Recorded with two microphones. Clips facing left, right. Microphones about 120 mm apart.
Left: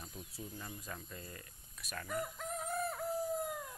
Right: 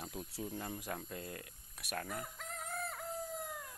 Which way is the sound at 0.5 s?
55° right (ahead or behind).